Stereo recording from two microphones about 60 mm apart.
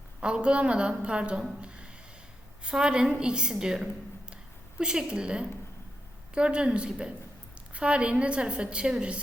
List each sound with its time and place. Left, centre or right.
0.2 s a woman's voice: centre
2.6 s a woman's voice: centre